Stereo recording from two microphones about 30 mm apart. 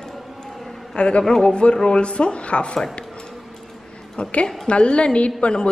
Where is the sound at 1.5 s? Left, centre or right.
Left.